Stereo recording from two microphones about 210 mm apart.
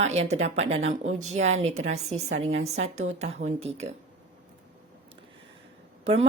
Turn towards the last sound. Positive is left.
turn(degrees=-30)  # may be behind; listen again after turning